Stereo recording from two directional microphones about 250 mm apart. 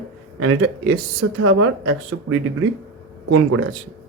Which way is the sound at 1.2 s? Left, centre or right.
Right.